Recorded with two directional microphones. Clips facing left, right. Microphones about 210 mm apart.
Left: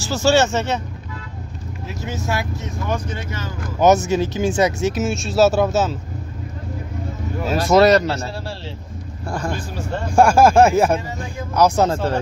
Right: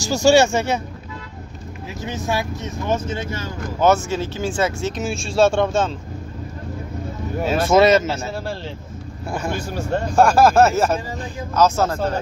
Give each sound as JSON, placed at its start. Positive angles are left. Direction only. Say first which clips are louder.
{"t": 0.0, "sound": "speech", "louder": "right 2 dB", "side_deg": -15}
{"t": 2.0, "sound": "speech", "louder": "right 1 dB", "side_deg": -15}
{"t": 3.8, "sound": "speech", "louder": "left 3 dB", "side_deg": 15}
{"t": 4.9, "sound": "speech", "louder": "left 2 dB", "side_deg": 0}
{"t": 7.4, "sound": "speech", "louder": "left 1 dB", "side_deg": 0}
{"t": 10.0, "sound": "speech", "louder": "left 2 dB", "side_deg": 10}